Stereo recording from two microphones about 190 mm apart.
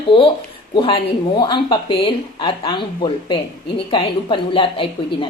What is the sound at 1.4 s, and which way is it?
Speech, 25° left (ahead or behind).